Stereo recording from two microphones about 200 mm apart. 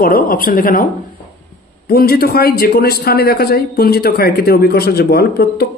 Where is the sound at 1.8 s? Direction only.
50° left (ahead or behind).